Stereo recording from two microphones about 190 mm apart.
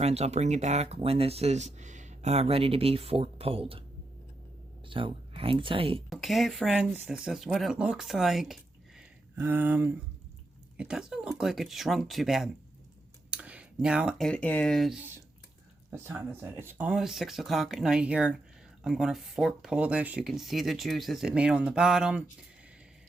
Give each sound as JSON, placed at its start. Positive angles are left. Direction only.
{"t": 0.0, "sound": "speech", "side_deg": -35}
{"t": 4.9, "sound": "speech", "side_deg": -25}
{"t": 6.1, "sound": "speech", "side_deg": 0}
{"t": 9.0, "sound": "a sound", "side_deg": -10}
{"t": 10.8, "sound": "speech", "side_deg": -5}